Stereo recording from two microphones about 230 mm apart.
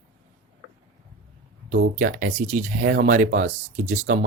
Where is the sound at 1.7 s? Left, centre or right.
Right.